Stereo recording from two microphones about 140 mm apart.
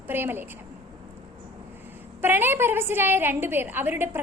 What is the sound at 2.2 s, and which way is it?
A woman's voice, 15° right (ahead or behind).